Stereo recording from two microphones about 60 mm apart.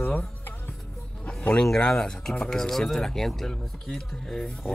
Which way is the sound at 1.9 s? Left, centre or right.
Centre.